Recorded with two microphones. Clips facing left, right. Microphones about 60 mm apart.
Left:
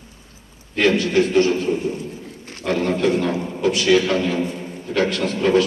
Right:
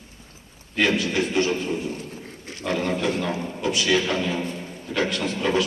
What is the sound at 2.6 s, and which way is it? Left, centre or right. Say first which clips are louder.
Speech: left 4 dB; centre.